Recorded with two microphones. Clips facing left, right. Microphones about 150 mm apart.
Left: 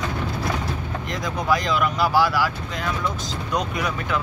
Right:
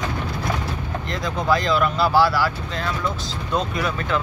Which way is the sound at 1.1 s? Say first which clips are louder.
Right 1 dB; 15° left (ahead or behind).